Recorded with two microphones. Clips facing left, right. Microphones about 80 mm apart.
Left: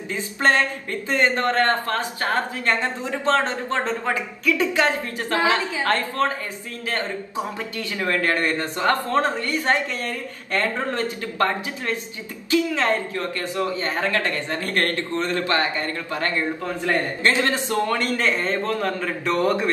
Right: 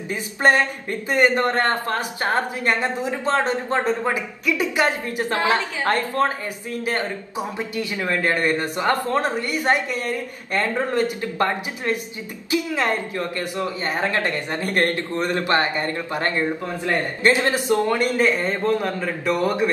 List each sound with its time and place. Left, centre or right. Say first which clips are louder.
0.1 s a woman's voice: right 2 dB; centre